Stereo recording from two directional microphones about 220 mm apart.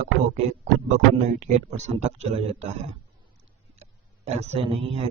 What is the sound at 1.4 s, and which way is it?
Speech, 30° right (ahead or behind).